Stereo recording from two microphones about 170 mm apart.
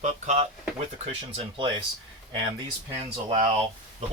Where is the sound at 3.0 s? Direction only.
35° right (ahead or behind).